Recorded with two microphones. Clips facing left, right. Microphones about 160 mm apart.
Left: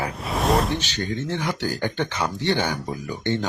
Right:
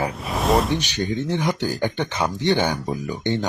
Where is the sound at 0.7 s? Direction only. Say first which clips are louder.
Right 3 dB; 15° right (ahead or behind).